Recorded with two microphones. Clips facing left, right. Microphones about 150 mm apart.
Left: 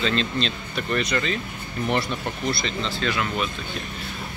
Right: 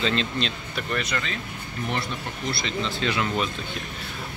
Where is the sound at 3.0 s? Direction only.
25° right (ahead or behind).